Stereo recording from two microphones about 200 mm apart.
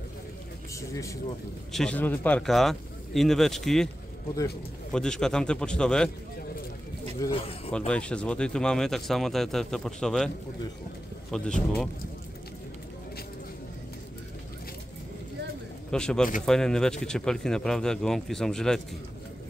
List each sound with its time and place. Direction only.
0.7 s speech: 15° left (ahead or behind)
1.7 s speech: 5° left (ahead or behind)
4.9 s speech: 5° left (ahead or behind)
7.2 s speech: 25° left (ahead or behind)
7.7 s speech: 5° left (ahead or behind)
11.3 s speech: 5° left (ahead or behind)
15.9 s speech: 5° left (ahead or behind)